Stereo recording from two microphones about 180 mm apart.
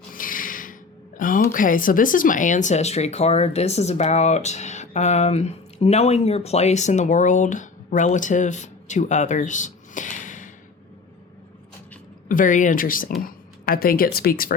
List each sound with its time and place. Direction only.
0.1 s a sound: 50° left (ahead or behind)
1.5 s speech: 50° left (ahead or behind)
12.3 s speech: 45° left (ahead or behind)